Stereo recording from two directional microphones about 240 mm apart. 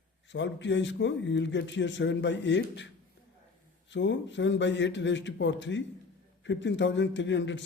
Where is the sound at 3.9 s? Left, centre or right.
Left.